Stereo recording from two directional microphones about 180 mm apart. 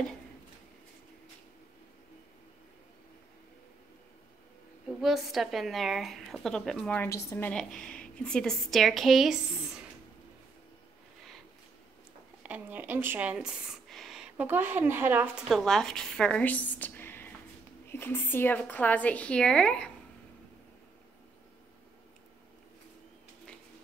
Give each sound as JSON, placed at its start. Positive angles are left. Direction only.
{"t": 5.0, "sound": "a woman's voice", "side_deg": 0}
{"t": 12.4, "sound": "a woman's voice", "side_deg": -10}